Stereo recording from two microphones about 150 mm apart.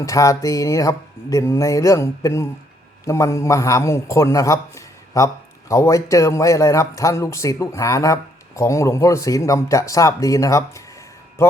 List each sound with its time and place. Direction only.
0.0 s a man's voice: 20° left (ahead or behind)